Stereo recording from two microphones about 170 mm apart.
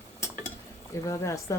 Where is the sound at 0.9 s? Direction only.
20° left (ahead or behind).